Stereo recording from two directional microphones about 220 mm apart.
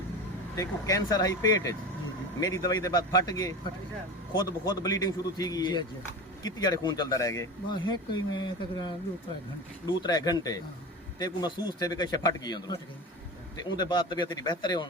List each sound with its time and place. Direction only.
0.5 s a man's voice: 15° left (ahead or behind)